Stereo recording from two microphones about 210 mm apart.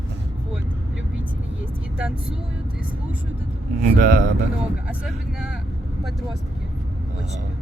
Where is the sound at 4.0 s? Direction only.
40° right (ahead or behind).